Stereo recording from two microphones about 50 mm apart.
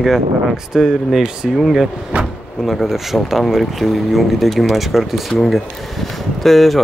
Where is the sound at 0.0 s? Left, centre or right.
Centre.